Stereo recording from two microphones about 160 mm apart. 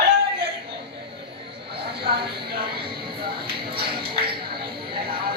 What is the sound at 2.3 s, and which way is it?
Speech, 75° right (ahead or behind).